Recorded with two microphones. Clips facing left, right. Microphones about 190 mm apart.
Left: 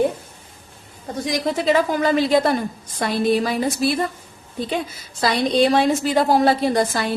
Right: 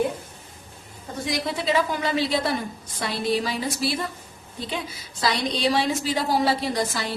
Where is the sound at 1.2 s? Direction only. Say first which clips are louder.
Left 5 dB; 45° left (ahead or behind).